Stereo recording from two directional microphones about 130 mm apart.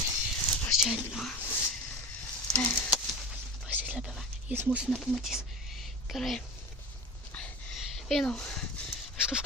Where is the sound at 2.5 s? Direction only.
10° left (ahead or behind).